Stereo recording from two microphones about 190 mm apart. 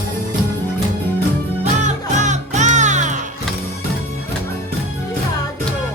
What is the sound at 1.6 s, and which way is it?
Music, 40° right (ahead or behind).